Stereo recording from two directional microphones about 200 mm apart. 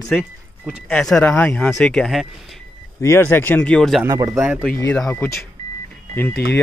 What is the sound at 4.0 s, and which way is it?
Speech, 15° right (ahead or behind).